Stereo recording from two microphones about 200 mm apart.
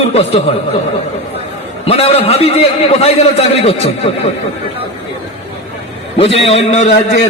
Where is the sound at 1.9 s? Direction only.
30° left (ahead or behind).